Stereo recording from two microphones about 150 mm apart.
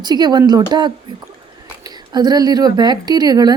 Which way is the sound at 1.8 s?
25° right (ahead or behind).